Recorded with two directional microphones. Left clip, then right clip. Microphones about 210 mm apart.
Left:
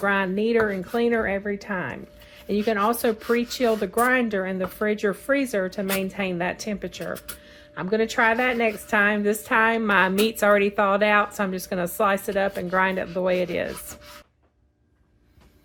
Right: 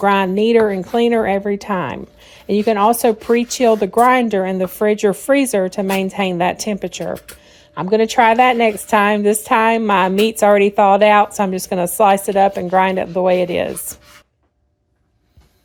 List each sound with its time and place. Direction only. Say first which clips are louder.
0.0 s a woman's voice: right 8 dB; 35° right (ahead or behind)